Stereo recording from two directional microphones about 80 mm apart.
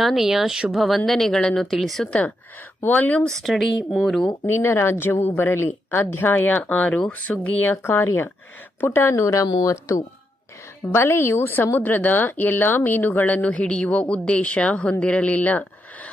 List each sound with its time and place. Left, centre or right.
0.0 s speech: centre
2.0 s a woman's voice: centre
3.4 s speech: centre
4.5 s a woman's voice: left
7.7 s a woman's voice: left
9.1 s speech: left
10.9 s a woman's voice: left